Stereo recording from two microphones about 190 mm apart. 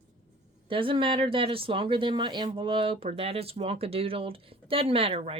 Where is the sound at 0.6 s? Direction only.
25° right (ahead or behind).